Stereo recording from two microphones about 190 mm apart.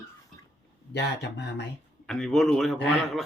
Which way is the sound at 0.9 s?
65° left (ahead or behind).